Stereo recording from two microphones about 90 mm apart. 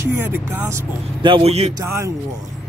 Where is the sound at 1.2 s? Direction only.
80° right.